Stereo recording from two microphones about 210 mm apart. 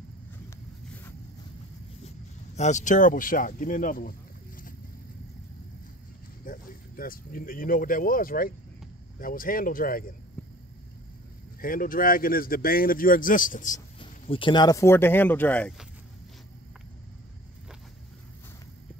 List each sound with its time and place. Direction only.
2.5 s speech: 35° left (ahead or behind)
6.4 s speech: 40° left (ahead or behind)
11.6 s speech: 40° left (ahead or behind)
13.9 s speech: 25° left (ahead or behind); by 15.9 s 5° left (ahead or behind)